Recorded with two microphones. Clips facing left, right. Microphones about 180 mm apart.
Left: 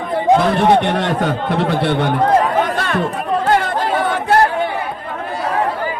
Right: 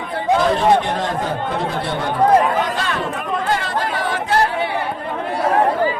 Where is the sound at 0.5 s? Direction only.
65° left (ahead or behind).